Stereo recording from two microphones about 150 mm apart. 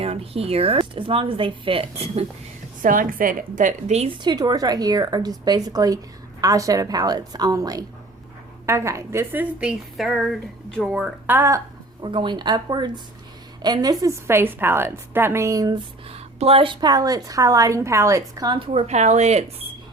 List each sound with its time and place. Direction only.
0.0 s a woman's voice: 40° right (ahead or behind)
2.8 s a woman's voice: 65° right (ahead or behind); by 4.1 s 50° right (ahead or behind)
4.2 s a woman's voice: 30° right (ahead or behind); by 11.1 s centre (ahead or behind)
11.3 s a woman's voice: 15° right (ahead or behind)
12.0 s a woman's voice: 35° right (ahead or behind)
16.0 s a woman's voice: 40° right (ahead or behind)